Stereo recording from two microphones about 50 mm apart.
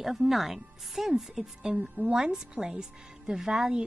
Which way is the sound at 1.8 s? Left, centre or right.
Right.